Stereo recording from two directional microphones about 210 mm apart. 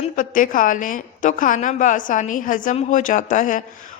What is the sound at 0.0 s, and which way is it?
A woman's voice, 40° left (ahead or behind).